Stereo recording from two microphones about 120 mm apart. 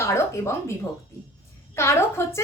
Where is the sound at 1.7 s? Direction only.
20° left (ahead or behind).